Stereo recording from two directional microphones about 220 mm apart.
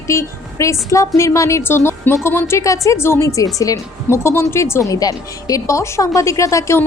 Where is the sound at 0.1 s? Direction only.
15° left (ahead or behind).